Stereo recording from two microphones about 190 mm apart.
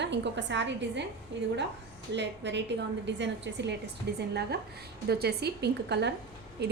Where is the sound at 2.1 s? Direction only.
65° right (ahead or behind).